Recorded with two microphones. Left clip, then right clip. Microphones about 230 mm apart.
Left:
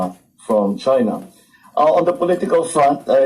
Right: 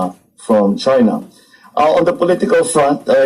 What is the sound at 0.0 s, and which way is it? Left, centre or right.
A man's voice, right.